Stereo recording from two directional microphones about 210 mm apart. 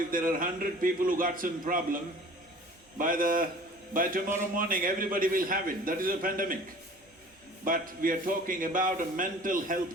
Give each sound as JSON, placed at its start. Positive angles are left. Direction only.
{"t": 0.1, "sound": "a man's voice", "side_deg": -40}
{"t": 3.0, "sound": "a man's voice", "side_deg": -40}
{"t": 7.6, "sound": "a man's voice", "side_deg": -40}